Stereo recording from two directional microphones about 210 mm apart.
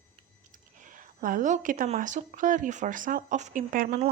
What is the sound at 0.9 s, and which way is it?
Speech, 40° right (ahead or behind).